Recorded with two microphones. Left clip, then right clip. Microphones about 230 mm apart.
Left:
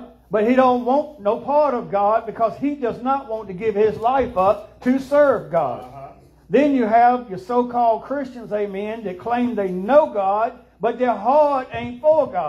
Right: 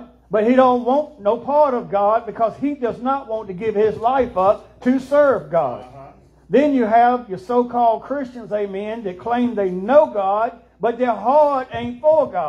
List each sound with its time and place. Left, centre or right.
0.3 s a man's voice: right